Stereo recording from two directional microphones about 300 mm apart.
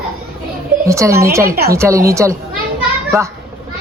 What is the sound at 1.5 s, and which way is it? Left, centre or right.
Speech, right.